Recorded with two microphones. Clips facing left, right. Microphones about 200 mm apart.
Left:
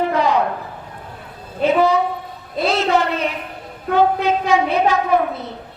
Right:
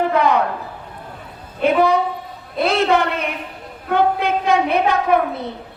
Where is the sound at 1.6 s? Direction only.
55° right (ahead or behind).